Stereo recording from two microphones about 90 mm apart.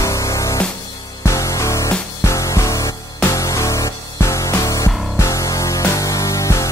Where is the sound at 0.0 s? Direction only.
35° left (ahead or behind).